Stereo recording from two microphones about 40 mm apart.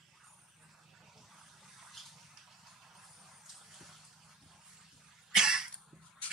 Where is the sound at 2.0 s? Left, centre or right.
Centre.